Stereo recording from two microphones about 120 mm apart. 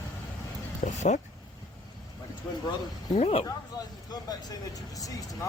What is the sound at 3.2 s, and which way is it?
Speech, 60° left (ahead or behind).